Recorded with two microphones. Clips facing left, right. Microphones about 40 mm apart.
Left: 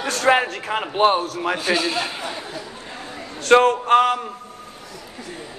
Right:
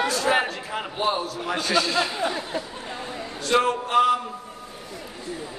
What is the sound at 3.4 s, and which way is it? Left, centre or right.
Speech, left.